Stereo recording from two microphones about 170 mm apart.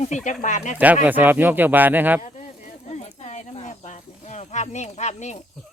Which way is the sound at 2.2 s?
45° left (ahead or behind).